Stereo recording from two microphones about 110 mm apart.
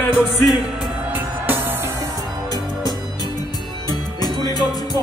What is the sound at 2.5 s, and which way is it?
Music, 35° left (ahead or behind).